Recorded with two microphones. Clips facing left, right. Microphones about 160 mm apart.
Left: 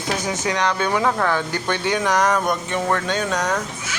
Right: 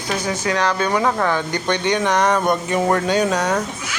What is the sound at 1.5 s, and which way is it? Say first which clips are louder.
Speech: right 3 dB; 5° left (ahead or behind).